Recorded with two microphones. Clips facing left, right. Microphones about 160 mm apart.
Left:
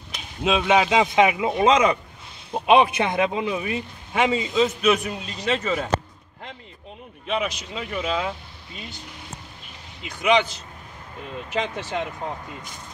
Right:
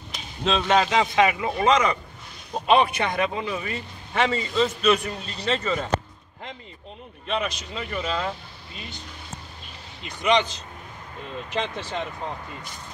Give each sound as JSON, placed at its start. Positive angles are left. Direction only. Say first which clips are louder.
{"t": 0.4, "sound": "a man's voice", "louder": "left 2 dB", "side_deg": 10}
{"t": 7.2, "sound": "speech", "louder": "left 2 dB", "side_deg": 5}
{"t": 10.0, "sound": "a man's voice", "louder": "left 2 dB", "side_deg": 10}